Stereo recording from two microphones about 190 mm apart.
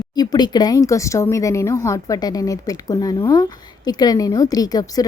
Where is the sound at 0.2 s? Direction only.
20° left (ahead or behind).